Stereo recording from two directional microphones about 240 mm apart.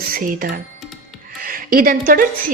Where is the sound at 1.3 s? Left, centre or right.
Right.